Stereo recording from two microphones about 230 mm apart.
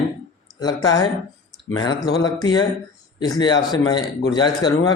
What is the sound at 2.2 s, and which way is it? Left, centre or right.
A man's voice, centre.